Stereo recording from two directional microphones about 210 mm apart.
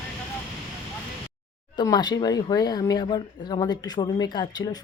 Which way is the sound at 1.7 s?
20° left (ahead or behind).